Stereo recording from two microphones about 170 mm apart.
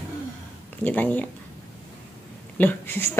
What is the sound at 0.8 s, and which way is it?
Speech, 10° left (ahead or behind).